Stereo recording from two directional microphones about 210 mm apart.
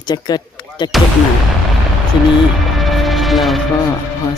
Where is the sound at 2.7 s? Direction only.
Centre (ahead or behind).